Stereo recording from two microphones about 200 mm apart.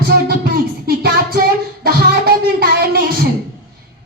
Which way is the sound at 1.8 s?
50° right (ahead or behind).